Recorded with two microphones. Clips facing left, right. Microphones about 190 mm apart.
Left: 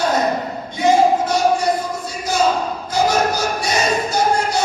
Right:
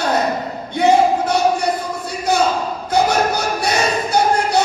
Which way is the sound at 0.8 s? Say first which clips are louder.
Right 1 dB; 60° right (ahead or behind).